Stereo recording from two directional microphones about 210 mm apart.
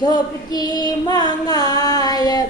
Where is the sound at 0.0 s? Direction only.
20° left (ahead or behind).